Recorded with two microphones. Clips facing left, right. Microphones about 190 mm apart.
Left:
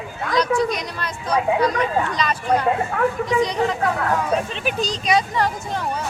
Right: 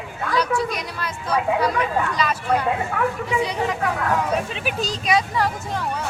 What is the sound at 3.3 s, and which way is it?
Speech, 10° right (ahead or behind).